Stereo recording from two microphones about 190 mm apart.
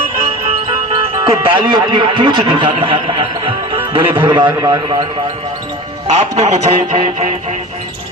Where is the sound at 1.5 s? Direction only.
25° right (ahead or behind).